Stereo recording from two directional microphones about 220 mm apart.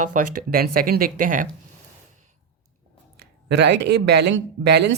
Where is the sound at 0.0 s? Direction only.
35° right (ahead or behind).